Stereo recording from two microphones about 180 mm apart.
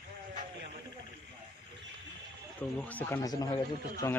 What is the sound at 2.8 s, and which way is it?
A man's voice, 10° left (ahead or behind).